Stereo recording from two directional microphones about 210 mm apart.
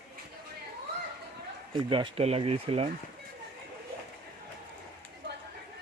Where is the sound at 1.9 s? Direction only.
25° right (ahead or behind).